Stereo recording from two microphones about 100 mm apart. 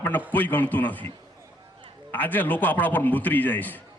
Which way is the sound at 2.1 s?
20° left (ahead or behind).